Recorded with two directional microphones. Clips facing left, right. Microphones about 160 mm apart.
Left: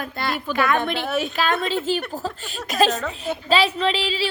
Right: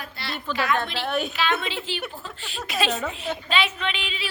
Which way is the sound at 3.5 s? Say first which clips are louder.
Left 8 dB; 35° left (ahead or behind).